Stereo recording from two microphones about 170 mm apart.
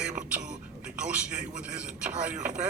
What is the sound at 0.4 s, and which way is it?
A man's voice, 5° right (ahead or behind).